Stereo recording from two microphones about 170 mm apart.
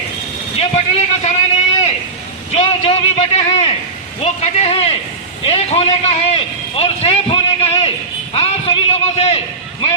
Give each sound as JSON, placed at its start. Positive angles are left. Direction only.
{"t": 0.5, "sound": "vehicle", "side_deg": 40}
{"t": 2.5, "sound": "a man's voice", "side_deg": 35}